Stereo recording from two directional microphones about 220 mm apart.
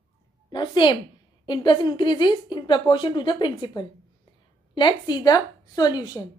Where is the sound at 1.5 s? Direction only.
20° left (ahead or behind).